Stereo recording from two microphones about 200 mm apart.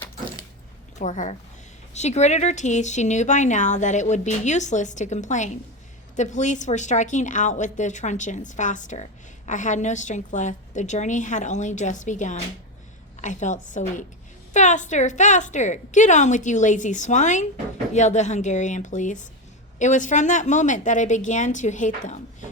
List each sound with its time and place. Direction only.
0.9 s speech: 40° left (ahead or behind)